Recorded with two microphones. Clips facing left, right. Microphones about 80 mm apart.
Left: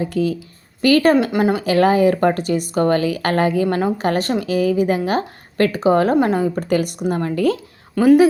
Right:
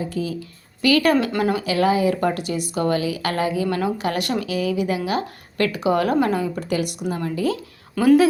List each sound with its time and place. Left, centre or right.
0.0 s speech: left
1.3 s speech: left
1.6 s speech: left
7.9 s speech: centre